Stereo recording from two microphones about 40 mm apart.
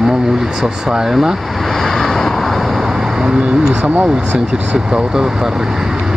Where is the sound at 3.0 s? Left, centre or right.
Centre.